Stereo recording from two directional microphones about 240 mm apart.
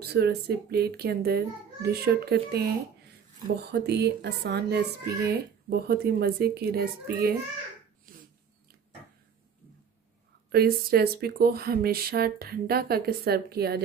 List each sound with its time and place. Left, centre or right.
0.0 s speech: right
3.8 s speech: right
10.5 s speech: right